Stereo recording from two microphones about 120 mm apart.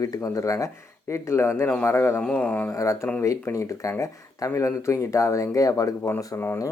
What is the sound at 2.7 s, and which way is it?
Speech, 25° left (ahead or behind).